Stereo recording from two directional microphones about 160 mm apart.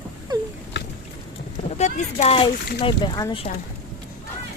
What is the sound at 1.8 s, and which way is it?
Speech, 45° left (ahead or behind).